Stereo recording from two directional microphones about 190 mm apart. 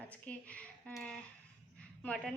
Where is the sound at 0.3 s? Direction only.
5° left (ahead or behind).